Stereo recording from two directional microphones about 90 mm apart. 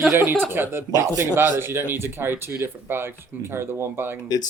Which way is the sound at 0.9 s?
40° right (ahead or behind).